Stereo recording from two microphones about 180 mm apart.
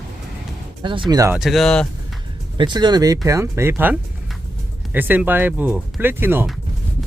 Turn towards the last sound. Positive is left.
turn(degrees=-10)  # may be behind; listen again after turning